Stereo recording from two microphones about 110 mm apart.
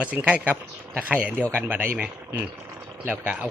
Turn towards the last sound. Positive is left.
turn(degrees=-15)  # may be behind; listen again after turning